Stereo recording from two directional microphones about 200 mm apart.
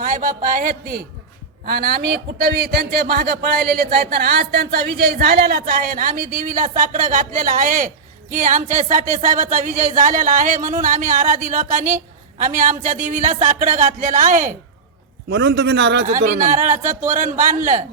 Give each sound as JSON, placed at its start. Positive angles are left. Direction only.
{"t": 0.0, "sound": "a man's voice", "side_deg": -40}
{"t": 15.3, "sound": "a man's voice", "side_deg": -60}
{"t": 16.0, "sound": "speech", "side_deg": -40}